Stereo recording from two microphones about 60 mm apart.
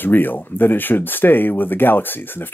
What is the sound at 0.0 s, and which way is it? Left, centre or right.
Speech, left.